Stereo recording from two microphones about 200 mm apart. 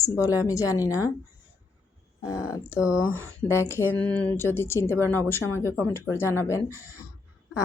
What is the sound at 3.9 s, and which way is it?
Speech, 5° left (ahead or behind).